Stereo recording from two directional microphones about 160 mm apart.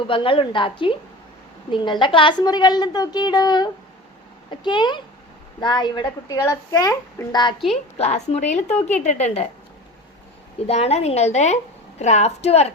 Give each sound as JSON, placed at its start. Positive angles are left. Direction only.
{"t": 0.1, "sound": "a woman's voice", "side_deg": 35}
{"t": 7.7, "sound": "a woman's voice", "side_deg": 40}
{"t": 10.7, "sound": "a woman's voice", "side_deg": 40}